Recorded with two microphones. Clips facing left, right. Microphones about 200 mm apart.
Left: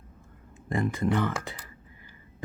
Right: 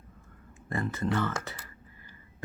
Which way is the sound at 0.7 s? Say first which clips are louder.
Left 4 dB; 15° left (ahead or behind).